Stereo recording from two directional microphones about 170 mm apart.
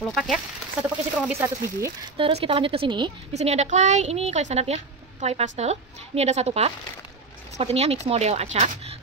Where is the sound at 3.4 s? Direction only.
40° right (ahead or behind).